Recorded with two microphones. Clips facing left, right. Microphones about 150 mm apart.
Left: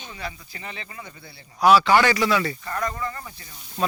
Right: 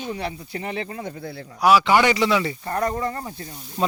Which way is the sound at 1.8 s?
20° right (ahead or behind).